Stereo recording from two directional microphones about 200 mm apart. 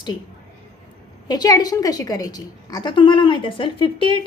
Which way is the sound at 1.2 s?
20° left (ahead or behind).